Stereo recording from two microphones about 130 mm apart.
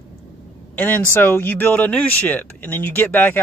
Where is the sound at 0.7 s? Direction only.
15° left (ahead or behind).